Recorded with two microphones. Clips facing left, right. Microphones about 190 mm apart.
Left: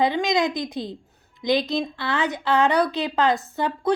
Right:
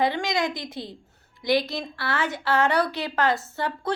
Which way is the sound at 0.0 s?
20° left (ahead or behind).